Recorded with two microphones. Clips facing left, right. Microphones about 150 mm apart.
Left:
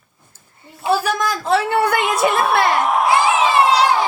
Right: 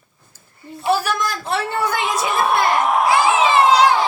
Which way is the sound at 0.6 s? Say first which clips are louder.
Right 8 dB; 25° left (ahead or behind).